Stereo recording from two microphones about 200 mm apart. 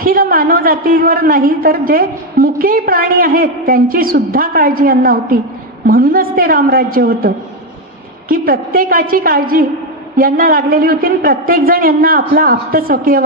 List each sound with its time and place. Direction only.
0.0 s a man's voice: 45° right (ahead or behind)